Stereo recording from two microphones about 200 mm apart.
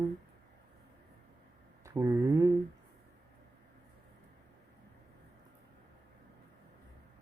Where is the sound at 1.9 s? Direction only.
15° right (ahead or behind).